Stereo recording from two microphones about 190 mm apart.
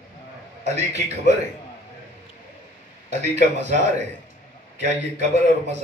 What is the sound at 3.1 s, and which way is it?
A man's voice, 35° right (ahead or behind).